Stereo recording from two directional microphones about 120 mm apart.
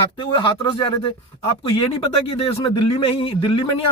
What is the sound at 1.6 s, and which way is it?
Speech, 55° left (ahead or behind).